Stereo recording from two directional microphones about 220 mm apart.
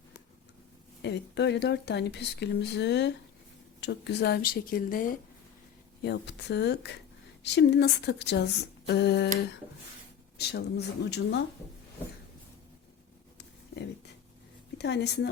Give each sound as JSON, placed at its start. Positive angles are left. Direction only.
{"t": 1.0, "sound": "speech", "side_deg": 50}
{"t": 6.0, "sound": "speech", "side_deg": 50}
{"t": 10.3, "sound": "speech", "side_deg": 50}
{"t": 14.8, "sound": "a woman's voice", "side_deg": 50}